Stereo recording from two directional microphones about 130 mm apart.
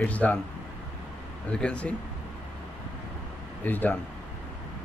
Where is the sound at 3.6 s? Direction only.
15° left (ahead or behind).